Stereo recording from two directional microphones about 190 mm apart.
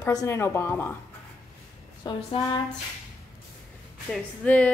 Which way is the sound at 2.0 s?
20° left (ahead or behind).